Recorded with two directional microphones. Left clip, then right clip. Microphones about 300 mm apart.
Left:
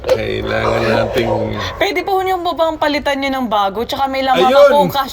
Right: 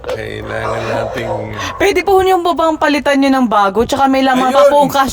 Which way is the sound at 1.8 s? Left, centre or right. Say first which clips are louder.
Right 5 dB; right.